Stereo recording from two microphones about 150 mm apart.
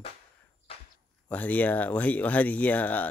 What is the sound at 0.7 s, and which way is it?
Walk, 40° left (ahead or behind).